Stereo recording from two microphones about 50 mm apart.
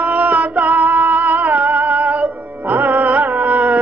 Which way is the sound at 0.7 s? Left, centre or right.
Right.